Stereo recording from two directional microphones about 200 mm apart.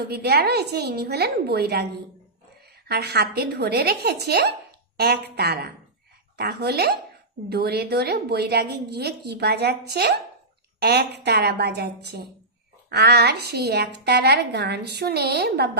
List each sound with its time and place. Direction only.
0.0 s a woman's voice: 55° right (ahead or behind)